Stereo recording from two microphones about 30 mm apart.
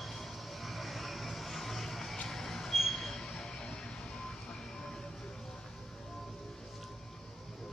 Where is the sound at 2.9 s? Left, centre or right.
Centre.